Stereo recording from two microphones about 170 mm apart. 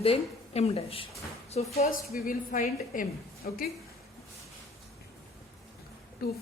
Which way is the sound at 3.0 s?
60° left (ahead or behind).